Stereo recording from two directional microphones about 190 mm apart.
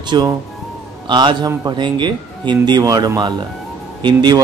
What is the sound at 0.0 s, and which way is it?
Speech, 20° right (ahead or behind).